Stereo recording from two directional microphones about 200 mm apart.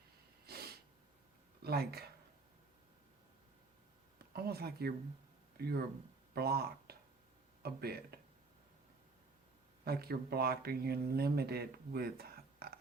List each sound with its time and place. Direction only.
0.4 s snort: 50° right (ahead or behind)
1.6 s speech: 50° right (ahead or behind)
4.2 s speech: 50° right (ahead or behind)
9.8 s speech: 50° right (ahead or behind)